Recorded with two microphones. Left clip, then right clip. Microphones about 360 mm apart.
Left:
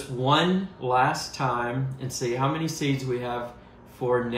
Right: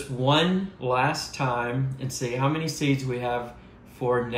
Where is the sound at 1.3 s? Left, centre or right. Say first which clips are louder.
Even; centre.